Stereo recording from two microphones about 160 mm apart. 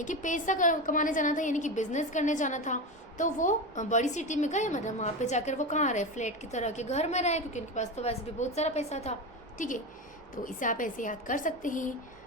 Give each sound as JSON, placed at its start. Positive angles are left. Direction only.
{"t": 0.0, "sound": "a woman's voice", "side_deg": 50}
{"t": 9.6, "sound": "a woman's voice", "side_deg": 55}